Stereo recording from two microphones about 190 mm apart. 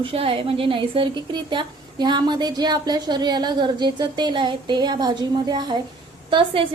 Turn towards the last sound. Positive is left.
turn(degrees=-30)  # may be behind; listen again after turning